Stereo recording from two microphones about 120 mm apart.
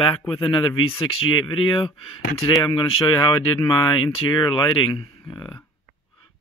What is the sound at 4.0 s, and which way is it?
Speech, 45° left (ahead or behind).